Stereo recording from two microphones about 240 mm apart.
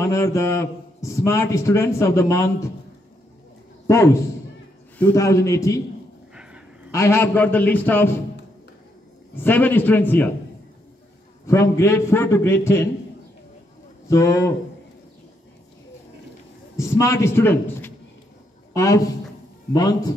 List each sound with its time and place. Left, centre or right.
0.0 s a man's voice: centre
3.8 s a man's voice: centre
6.3 s a sound: centre
6.9 s a man's voice: centre
9.4 s a man's voice: centre
11.4 s a man's voice: centre
14.0 s a man's voice: centre
16.7 s a man's voice: centre